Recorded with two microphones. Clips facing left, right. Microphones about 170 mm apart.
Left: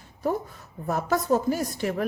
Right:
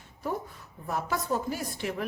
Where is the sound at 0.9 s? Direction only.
45° left (ahead or behind).